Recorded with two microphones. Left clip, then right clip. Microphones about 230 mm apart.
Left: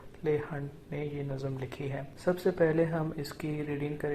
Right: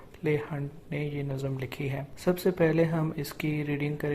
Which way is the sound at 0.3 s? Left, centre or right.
Right.